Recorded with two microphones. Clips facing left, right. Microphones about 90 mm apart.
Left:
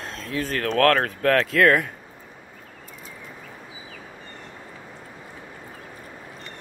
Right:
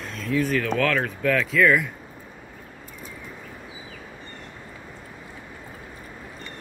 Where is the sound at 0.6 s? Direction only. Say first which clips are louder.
Left 4 dB; 55° left (ahead or behind).